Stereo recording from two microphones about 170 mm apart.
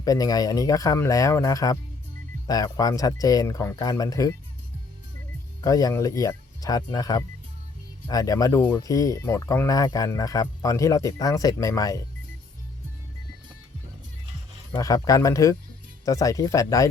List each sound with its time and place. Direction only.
0.0 s speech: 20° left (ahead or behind)
5.6 s speech: 20° left (ahead or behind)
14.7 s speech: 20° left (ahead or behind)